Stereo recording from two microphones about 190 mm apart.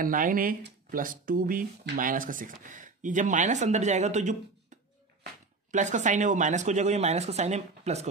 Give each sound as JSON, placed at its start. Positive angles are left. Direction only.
{"t": 0.0, "sound": "speech", "side_deg": -45}